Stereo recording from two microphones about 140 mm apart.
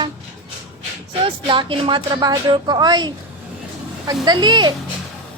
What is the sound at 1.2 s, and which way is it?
A woman's voice, 40° right (ahead or behind).